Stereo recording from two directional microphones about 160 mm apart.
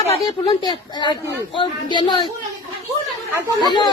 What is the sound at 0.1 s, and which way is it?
Speech, 30° left (ahead or behind).